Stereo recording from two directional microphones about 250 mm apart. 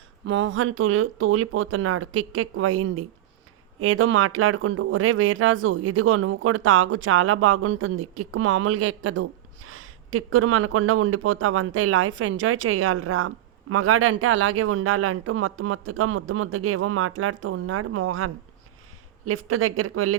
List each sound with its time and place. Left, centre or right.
0.3 s speech: right